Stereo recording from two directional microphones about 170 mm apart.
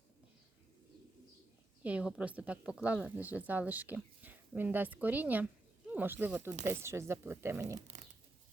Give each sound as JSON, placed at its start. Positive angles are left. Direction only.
{"t": 1.8, "sound": "speech", "side_deg": -5}